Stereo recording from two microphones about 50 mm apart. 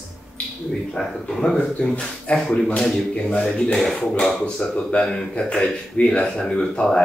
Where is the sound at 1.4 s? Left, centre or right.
Centre.